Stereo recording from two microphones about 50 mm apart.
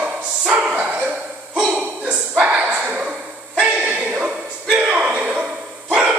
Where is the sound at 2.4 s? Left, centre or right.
Right.